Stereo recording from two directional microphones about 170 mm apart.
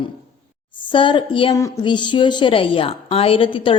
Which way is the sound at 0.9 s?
30° left (ahead or behind).